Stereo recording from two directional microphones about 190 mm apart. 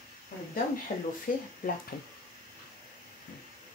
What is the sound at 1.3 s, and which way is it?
Speech, 45° left (ahead or behind).